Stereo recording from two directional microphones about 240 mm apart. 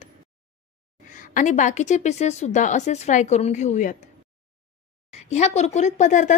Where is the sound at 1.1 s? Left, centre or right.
Left.